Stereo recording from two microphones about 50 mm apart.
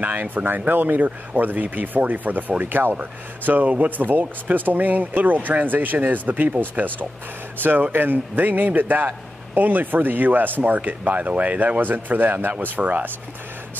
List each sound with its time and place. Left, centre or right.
0.0 s speech: right